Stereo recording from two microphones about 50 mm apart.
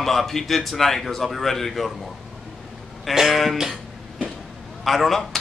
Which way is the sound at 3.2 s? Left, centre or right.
Centre.